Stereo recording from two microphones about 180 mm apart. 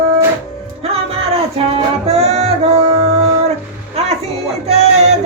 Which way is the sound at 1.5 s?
35° right (ahead or behind).